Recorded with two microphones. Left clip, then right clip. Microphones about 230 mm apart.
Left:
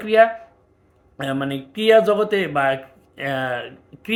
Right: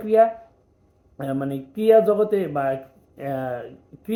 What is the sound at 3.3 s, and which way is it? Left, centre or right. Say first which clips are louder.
Speech: left 4 dB; left.